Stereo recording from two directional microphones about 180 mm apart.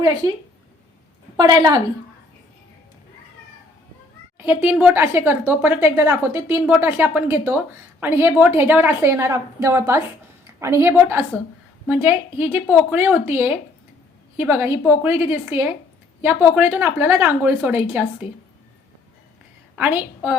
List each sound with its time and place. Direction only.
1.4 s a woman's voice: 20° right (ahead or behind)
4.4 s a woman's voice: 10° right (ahead or behind)
19.7 s a woman's voice: 10° right (ahead or behind)